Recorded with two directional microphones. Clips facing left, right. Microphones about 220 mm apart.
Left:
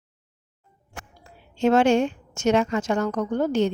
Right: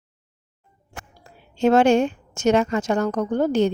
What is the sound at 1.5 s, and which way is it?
Speech, 45° right (ahead or behind).